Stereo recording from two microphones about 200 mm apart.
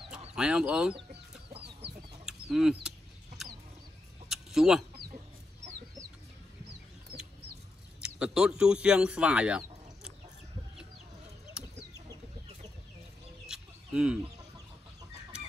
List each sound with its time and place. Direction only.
0.3 s speech: 5° right (ahead or behind)
2.2 s bird: 5° right (ahead or behind)
4.3 s chicken: centre (ahead or behind)
8.0 s speech: 5° right (ahead or behind)
13.5 s bird: 5° right (ahead or behind)